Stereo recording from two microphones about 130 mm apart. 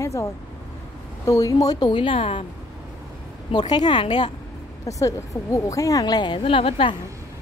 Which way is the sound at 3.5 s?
35° left (ahead or behind).